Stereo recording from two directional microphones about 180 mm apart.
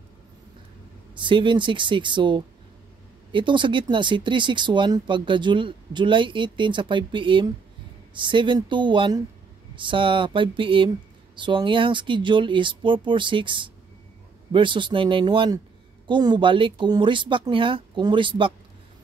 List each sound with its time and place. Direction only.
1.1 s speech: 25° right (ahead or behind)